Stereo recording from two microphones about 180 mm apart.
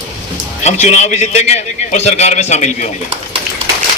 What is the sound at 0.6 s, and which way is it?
A man's voice, 40° left (ahead or behind).